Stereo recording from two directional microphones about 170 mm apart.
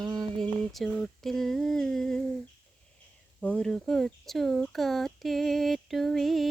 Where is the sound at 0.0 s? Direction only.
20° right (ahead or behind).